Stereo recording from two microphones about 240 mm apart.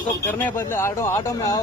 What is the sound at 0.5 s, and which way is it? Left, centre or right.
Speech, centre.